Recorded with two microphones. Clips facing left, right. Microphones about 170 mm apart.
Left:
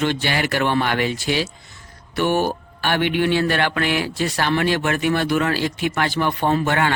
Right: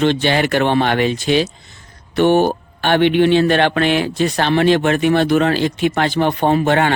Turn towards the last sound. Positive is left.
turn(degrees=-20)  # may be behind; listen again after turning